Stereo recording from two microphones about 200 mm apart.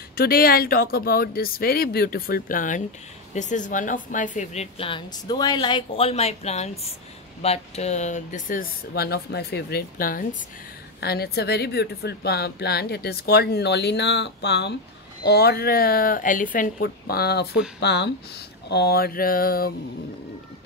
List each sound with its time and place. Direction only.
0.1 s a woman's voice: 50° left (ahead or behind)